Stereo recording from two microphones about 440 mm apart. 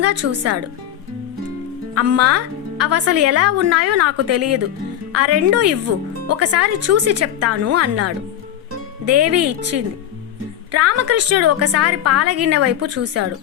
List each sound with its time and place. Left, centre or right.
0.0 s speech: right
2.0 s speech: right